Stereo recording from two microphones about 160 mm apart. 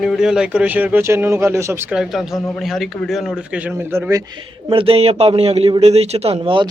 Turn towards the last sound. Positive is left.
turn(degrees=-35)  # may be behind; listen again after turning